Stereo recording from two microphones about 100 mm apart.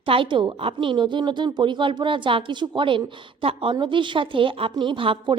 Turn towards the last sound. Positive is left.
turn(degrees=-60)  # may be behind; listen again after turning